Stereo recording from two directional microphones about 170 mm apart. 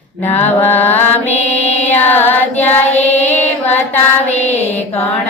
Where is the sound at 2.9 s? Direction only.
40° left (ahead or behind).